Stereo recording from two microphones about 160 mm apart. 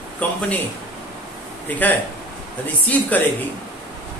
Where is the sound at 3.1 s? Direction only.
10° left (ahead or behind).